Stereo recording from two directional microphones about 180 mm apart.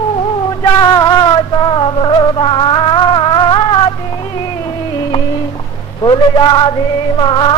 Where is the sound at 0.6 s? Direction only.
20° left (ahead or behind).